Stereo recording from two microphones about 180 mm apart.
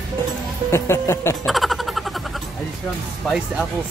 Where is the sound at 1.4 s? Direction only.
Centre (ahead or behind).